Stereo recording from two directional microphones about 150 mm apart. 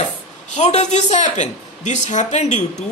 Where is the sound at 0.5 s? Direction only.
50° left (ahead or behind).